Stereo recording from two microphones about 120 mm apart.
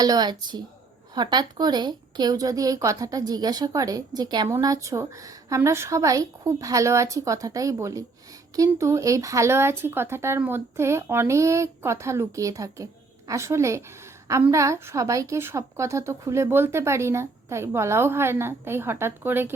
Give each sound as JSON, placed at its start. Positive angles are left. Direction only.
{"t": 0.0, "sound": "a woman's voice", "side_deg": -35}